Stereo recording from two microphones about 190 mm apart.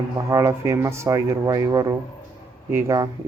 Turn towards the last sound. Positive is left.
turn(degrees=-15)  # may be behind; listen again after turning